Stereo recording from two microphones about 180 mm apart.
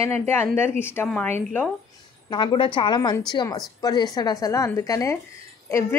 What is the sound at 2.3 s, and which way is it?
A woman's voice, 25° left (ahead or behind).